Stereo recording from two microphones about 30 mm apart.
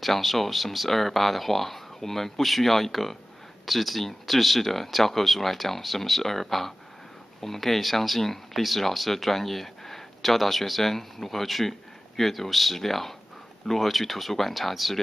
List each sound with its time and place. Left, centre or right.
0.0 s speech: centre